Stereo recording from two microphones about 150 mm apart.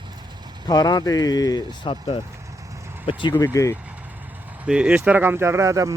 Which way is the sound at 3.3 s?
20° left (ahead or behind).